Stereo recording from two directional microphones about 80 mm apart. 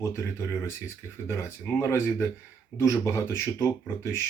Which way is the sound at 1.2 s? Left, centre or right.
Left.